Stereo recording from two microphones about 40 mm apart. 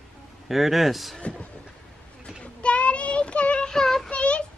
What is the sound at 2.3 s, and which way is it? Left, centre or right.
Child singing, left.